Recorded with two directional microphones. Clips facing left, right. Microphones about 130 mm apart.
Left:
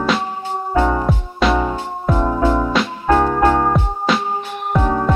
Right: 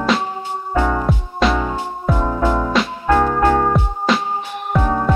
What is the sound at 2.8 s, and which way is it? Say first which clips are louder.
Music: even; centre (ahead or behind).